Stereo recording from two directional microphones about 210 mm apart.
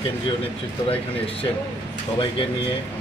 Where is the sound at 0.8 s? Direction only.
25° left (ahead or behind).